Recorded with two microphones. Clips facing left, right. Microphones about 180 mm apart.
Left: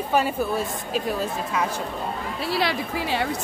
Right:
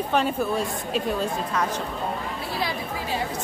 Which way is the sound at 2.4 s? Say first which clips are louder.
Left 6 dB; 80° left.